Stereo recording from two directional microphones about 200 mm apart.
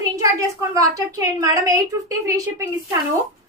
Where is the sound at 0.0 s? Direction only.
15° right (ahead or behind).